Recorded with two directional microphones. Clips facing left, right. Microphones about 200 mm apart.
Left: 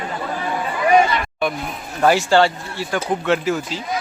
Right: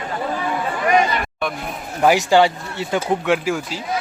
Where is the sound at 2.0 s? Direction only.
15° right (ahead or behind).